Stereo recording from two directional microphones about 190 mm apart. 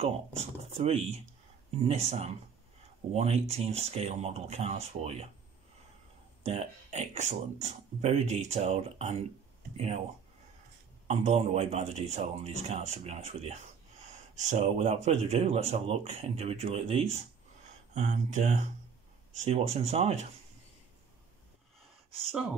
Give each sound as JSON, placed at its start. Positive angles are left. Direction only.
{"t": 0.0, "sound": "speech", "side_deg": -30}
{"t": 6.4, "sound": "speech", "side_deg": -35}
{"t": 11.1, "sound": "speech", "side_deg": -35}